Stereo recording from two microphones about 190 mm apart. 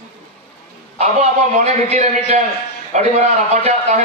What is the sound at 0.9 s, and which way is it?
A man's voice, 35° right (ahead or behind).